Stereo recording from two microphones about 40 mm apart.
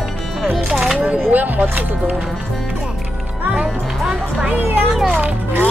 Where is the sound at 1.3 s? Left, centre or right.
Right.